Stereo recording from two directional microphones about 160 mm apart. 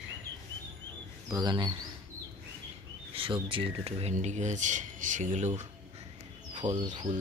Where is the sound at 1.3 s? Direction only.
25° right (ahead or behind).